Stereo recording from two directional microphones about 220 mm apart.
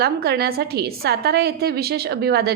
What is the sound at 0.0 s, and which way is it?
A woman's voice, 45° right (ahead or behind).